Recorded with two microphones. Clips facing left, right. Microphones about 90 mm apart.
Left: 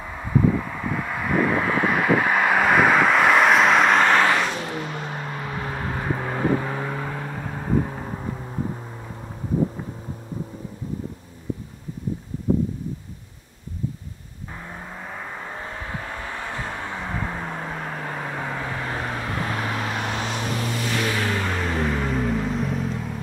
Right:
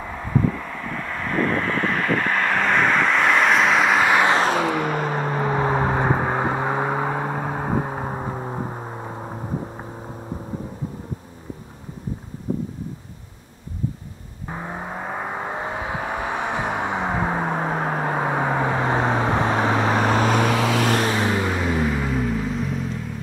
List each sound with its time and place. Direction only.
0.5 s vehicle: 10° left (ahead or behind); by 4.3 s 5° right (ahead or behind)
4.6 s car: 60° right (ahead or behind); by 6.0 s 30° right (ahead or behind)
6.2 s vehicle: 25° right (ahead or behind)
14.5 s vehicle: 35° right (ahead or behind)
15.5 s vehicle: 20° right (ahead or behind)
17.3 s vehicle: 60° right (ahead or behind)
18.7 s vehicle: 25° right (ahead or behind)
20.0 s vehicle: 45° right (ahead or behind)
20.4 s vehicle: 90° right
20.9 s vehicle: 35° right (ahead or behind)
21.2 s music: 20° right (ahead or behind)
21.5 s vehicle: 5° right (ahead or behind)